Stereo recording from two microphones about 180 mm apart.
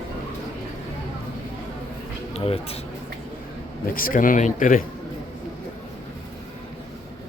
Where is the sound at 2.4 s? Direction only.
35° left (ahead or behind).